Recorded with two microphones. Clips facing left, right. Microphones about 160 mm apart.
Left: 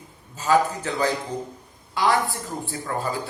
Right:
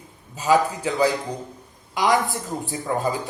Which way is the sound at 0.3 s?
15° right (ahead or behind).